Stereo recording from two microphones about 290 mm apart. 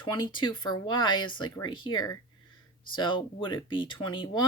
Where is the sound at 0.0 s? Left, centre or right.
Centre.